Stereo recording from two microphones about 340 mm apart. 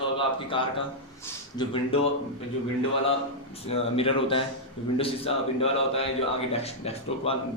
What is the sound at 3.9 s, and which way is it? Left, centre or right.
A man's voice, centre.